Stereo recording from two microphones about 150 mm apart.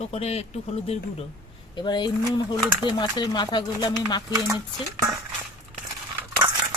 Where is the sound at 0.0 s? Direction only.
40° left (ahead or behind).